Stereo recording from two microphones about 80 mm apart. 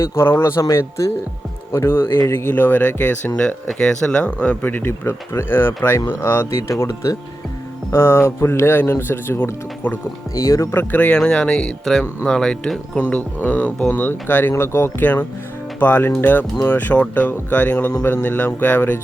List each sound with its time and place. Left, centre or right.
0.0 s speech: left
10.8 s speech: left
13.0 s speech: centre